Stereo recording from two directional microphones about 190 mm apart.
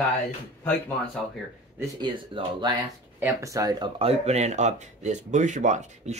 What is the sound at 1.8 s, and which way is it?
Speech, 25° right (ahead or behind).